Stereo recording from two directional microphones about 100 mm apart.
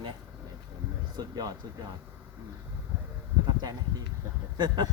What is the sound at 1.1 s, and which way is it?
Speech, 40° right (ahead or behind).